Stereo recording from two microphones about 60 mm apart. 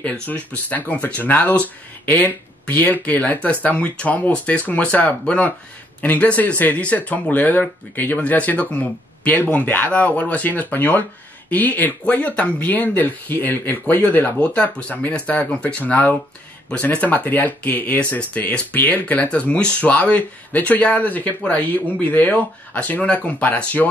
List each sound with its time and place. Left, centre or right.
0.3 s speech: left